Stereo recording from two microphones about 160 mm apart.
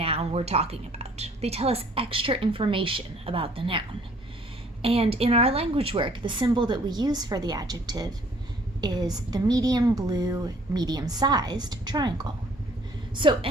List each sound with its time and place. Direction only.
0.0 s a woman's voice: 40° right (ahead or behind)